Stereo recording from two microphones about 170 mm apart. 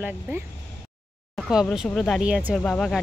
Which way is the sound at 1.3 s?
Centre (ahead or behind).